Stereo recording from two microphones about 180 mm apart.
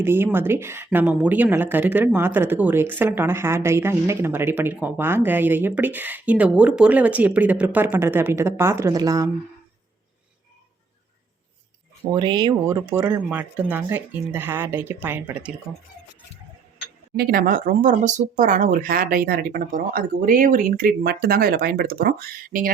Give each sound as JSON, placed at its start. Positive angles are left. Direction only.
{"t": 0.0, "sound": "speech", "side_deg": -10}
{"t": 12.1, "sound": "speech", "side_deg": -25}
{"t": 17.2, "sound": "speech", "side_deg": -55}